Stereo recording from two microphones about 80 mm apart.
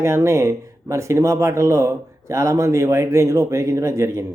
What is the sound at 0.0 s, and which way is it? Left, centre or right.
A man's voice, right.